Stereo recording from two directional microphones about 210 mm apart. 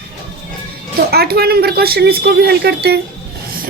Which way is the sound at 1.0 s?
50° right (ahead or behind).